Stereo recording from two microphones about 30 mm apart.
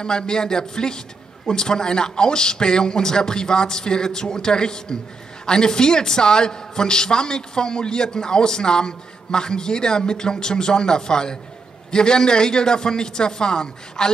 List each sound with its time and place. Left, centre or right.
0.0 s a woman's voice: left